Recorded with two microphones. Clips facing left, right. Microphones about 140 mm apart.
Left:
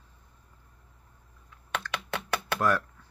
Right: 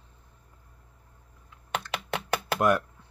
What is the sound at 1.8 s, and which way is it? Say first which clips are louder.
Computer keyboard: right 2 dB; 20° right (ahead or behind).